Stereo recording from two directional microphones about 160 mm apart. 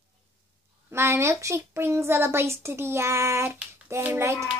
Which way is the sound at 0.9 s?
15° right (ahead or behind).